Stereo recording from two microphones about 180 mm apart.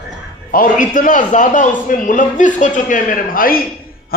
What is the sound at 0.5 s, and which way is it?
A man's voice, 50° left (ahead or behind).